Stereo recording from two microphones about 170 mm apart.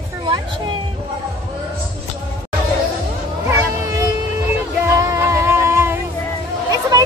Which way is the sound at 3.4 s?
20° right (ahead or behind).